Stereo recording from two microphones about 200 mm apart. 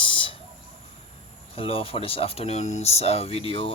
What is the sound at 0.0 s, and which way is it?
Bird, 25° left (ahead or behind).